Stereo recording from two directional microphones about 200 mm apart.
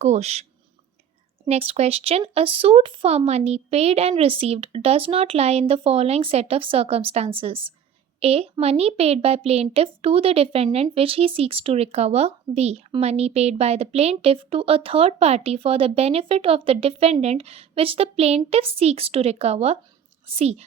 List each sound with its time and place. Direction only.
0.0 s speech: 35° right (ahead or behind)
1.5 s speech: 30° right (ahead or behind)